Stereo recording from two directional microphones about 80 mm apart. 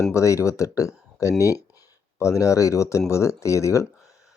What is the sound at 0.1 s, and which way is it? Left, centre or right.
Speech, left.